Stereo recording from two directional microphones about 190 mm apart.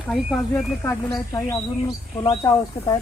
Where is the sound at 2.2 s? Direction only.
25° left (ahead or behind).